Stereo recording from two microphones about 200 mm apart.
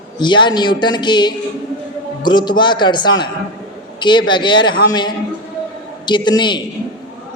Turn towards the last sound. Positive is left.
turn(degrees=20)  # may be behind; listen again after turning